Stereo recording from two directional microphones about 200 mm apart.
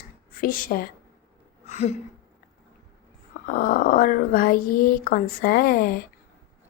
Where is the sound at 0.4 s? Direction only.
45° left (ahead or behind).